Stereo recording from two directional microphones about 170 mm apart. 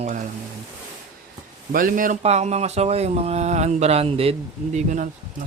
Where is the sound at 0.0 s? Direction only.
45° right (ahead or behind).